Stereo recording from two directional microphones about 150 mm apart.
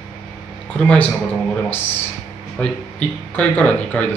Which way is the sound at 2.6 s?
10° left (ahead or behind).